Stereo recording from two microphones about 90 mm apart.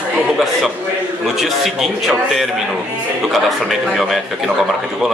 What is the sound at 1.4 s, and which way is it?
A man's voice, centre (ahead or behind).